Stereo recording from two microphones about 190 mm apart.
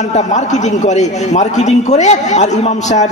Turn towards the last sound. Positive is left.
turn(degrees=40)  # may be behind; listen again after turning